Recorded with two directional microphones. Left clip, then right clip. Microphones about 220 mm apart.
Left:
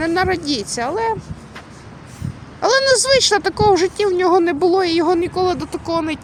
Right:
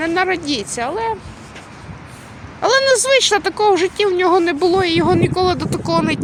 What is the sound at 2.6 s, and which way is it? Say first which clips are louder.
Speech: right 1 dB; 15° left (ahead or behind).